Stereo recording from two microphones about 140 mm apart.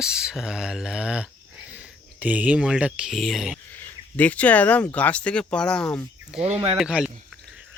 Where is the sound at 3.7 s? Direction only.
15° left (ahead or behind).